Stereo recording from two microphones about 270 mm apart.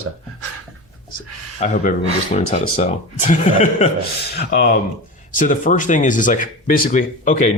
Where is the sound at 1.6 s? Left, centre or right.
Left.